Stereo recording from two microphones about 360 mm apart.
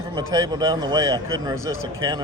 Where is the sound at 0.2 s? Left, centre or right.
Centre.